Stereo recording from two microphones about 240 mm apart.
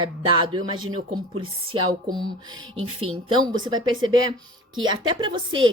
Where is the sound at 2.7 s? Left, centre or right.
Right.